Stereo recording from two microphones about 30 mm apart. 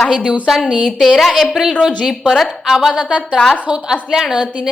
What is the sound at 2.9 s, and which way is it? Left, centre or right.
Speech, right.